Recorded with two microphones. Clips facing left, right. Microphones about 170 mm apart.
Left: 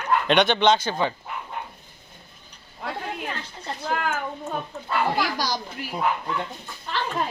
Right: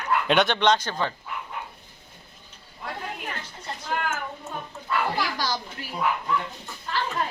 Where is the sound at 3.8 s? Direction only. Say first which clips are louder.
Left 3 dB; 60° left (ahead or behind).